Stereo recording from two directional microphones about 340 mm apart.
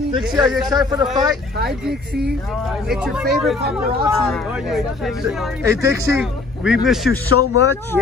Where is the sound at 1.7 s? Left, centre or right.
Centre.